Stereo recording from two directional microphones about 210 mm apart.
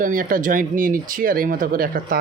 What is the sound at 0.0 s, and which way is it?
Speech, 40° right (ahead or behind).